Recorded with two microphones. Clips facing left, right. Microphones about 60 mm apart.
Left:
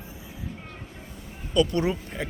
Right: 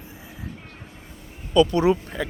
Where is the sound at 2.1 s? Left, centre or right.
Right.